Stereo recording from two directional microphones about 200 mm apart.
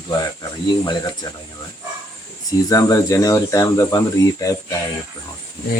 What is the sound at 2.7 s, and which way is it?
Speech, 15° left (ahead or behind).